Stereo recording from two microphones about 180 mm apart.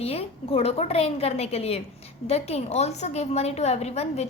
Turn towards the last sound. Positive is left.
turn(degrees=35)  # may be behind; listen again after turning